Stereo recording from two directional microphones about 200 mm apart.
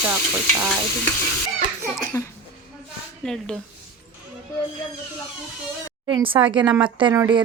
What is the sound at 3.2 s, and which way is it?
Speech, centre (ahead or behind).